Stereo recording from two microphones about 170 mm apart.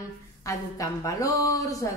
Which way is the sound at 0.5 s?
20° left (ahead or behind).